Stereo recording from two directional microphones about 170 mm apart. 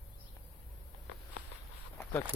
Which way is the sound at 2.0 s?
15° left (ahead or behind).